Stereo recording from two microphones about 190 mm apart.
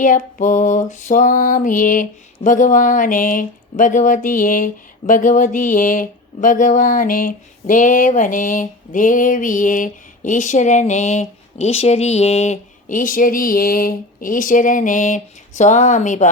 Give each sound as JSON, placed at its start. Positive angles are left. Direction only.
{"t": 0.0, "sound": "mantra", "side_deg": 45}